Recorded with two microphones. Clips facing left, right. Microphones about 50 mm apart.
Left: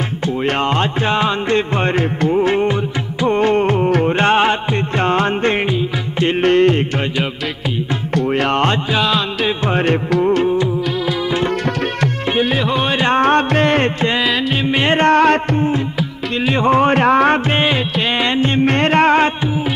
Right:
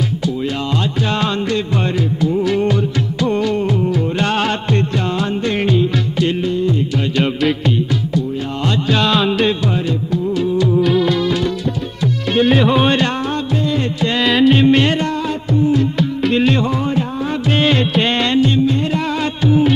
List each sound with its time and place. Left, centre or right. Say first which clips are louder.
1.5 s music: left 3 dB; left
4.3 s music: left 6 dB; left
5.0 s music: left 4 dB; left
6.4 s music: left 6 dB; left
8.9 s music: right 2 dB; centre
9.8 s music: left 5 dB; left
10.8 s music: right 5 dB; centre
12.4 s music: right 5 dB; centre
13.2 s music: left 6 dB; left
14.2 s music: right 5 dB; centre
15.0 s music: left 8 dB; left
16.6 s music: left 7 dB; left
16.9 s music: left 8 dB; left
18.6 s music: left 4 dB; left